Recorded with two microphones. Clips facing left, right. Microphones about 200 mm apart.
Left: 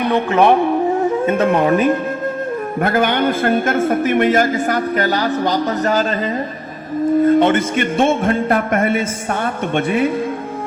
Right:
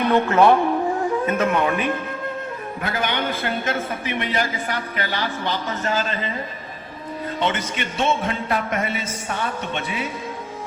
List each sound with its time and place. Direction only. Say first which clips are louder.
0.1 s music: left 2 dB; 20° left (ahead or behind)
1.0 s speech: left 5 dB; 25° left (ahead or behind)
2.8 s a man's voice: left 9 dB; 50° left (ahead or behind)
7.3 s a man's voice: left 12 dB; 50° left (ahead or behind)